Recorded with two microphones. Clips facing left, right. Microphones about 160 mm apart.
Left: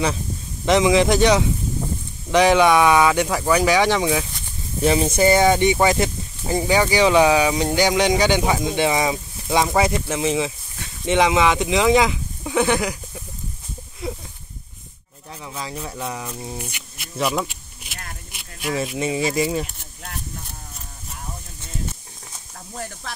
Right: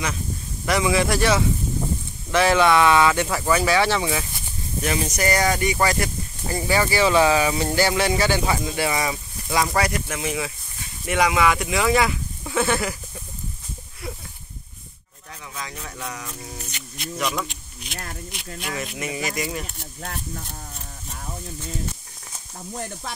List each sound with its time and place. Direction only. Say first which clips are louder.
0.7 s speech: left 5 dB; 20° left (ahead or behind)
4.8 s speech: left 7 dB; 25° left (ahead or behind)
14.0 s a sound: left 5 dB; 20° left (ahead or behind)
15.4 s speech: left 5 dB; 30° left (ahead or behind)
16.7 s speech: even; 5° left (ahead or behind)
18.9 s speech: left 8 dB; 30° left (ahead or behind)